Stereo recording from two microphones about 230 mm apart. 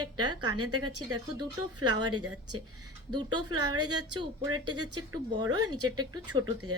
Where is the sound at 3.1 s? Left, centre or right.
Centre.